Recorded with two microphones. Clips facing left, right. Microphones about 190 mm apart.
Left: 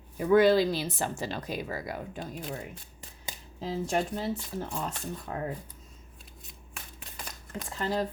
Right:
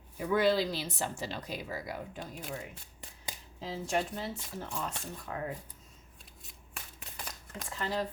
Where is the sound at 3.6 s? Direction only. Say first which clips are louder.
Left 4 dB; 40° left (ahead or behind).